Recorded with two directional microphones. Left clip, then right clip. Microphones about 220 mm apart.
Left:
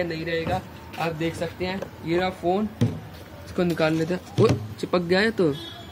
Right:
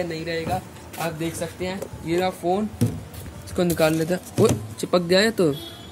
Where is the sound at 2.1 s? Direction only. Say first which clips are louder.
Right 1 dB; 15° right (ahead or behind).